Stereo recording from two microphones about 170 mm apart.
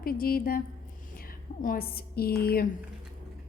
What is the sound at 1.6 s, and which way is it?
A woman's voice, 60° left (ahead or behind).